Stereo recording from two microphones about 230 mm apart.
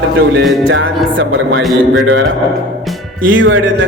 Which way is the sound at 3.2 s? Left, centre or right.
Right.